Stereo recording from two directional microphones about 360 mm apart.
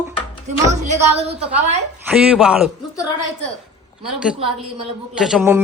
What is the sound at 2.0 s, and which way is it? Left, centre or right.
Speech, centre.